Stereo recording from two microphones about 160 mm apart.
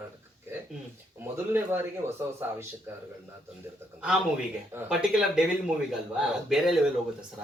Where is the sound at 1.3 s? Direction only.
15° right (ahead or behind).